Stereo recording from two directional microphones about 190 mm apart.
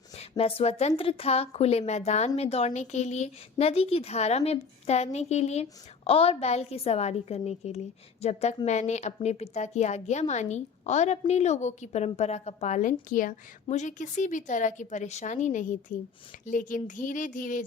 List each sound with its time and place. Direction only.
0.2 s a woman's voice: 30° left (ahead or behind)